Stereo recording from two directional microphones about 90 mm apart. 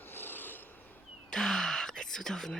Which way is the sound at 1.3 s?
5° left (ahead or behind).